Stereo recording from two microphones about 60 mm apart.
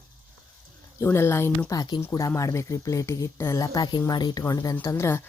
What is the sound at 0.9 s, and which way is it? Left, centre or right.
Speech, left.